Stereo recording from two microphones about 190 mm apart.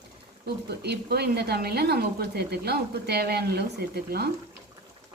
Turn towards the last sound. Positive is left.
turn(degrees=-55)  # may be behind; listen again after turning